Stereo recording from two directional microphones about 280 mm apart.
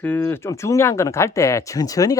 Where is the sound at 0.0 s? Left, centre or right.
Centre.